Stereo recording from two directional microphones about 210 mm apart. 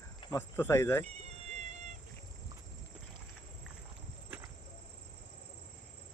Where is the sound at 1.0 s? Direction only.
30° right (ahead or behind).